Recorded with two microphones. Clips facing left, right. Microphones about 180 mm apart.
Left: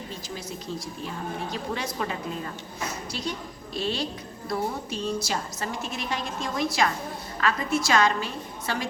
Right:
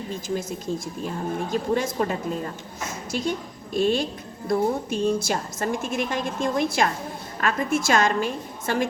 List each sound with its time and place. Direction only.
1.0 s a woman's voice: 45° right (ahead or behind)